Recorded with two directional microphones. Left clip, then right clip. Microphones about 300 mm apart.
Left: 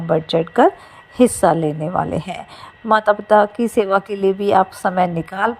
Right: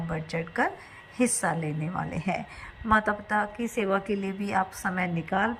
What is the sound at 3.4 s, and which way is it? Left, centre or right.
Speech, left.